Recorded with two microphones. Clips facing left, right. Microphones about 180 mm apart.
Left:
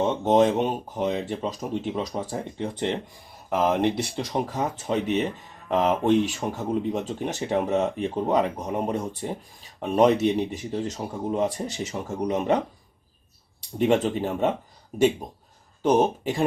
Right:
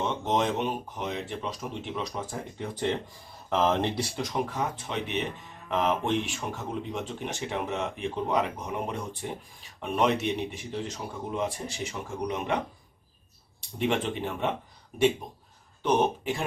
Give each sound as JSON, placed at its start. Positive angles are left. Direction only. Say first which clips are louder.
{"t": 0.0, "sound": "speech", "louder": "left 8 dB", "side_deg": 35}
{"t": 3.5, "sound": "speech", "louder": "left 3 dB", "side_deg": 10}
{"t": 4.3, "sound": "speech", "louder": "left 5 dB", "side_deg": 35}
{"t": 13.7, "sound": "speech", "louder": "left 6 dB", "side_deg": 40}